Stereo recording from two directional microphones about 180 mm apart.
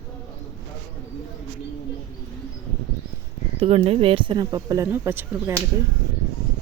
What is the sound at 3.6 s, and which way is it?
Speech, 30° right (ahead or behind).